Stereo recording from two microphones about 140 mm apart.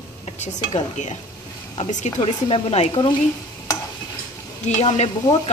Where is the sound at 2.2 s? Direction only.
40° left (ahead or behind).